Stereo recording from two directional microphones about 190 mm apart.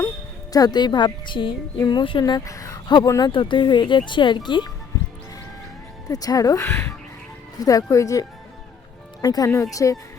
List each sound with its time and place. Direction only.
0.5 s a woman's voice: 20° left (ahead or behind)
6.1 s speech: 20° left (ahead or behind)